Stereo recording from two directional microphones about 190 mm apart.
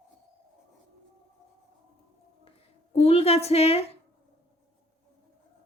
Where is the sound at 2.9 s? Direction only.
30° left (ahead or behind).